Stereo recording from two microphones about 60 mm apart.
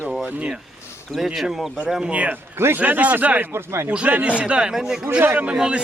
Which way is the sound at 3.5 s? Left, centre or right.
Right.